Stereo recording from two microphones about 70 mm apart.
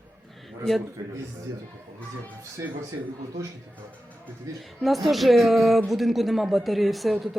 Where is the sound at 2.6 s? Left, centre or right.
Right.